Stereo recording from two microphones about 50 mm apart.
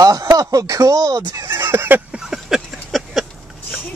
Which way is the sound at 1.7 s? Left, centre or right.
Right.